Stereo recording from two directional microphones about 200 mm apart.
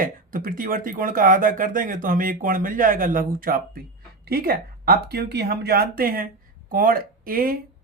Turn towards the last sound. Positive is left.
turn(degrees=-45)  # may be behind; listen again after turning